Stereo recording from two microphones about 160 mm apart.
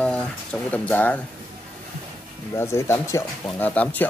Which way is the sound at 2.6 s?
15° left (ahead or behind).